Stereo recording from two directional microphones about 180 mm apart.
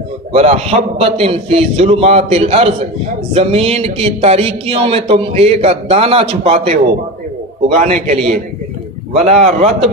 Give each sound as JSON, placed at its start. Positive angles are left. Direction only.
{"t": 0.3, "sound": "speech", "side_deg": -35}